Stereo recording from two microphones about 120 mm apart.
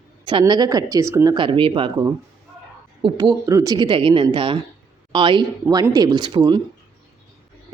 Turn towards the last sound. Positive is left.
turn(degrees=-40)  # may be behind; listen again after turning